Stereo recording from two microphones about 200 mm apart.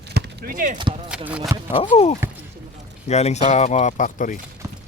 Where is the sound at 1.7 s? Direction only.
30° left (ahead or behind).